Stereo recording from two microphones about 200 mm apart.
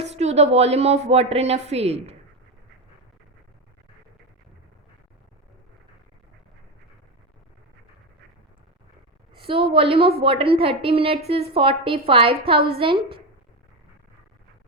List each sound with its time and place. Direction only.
0.1 s a woman's voice: 35° right (ahead or behind)
9.4 s a woman's voice: 25° right (ahead or behind)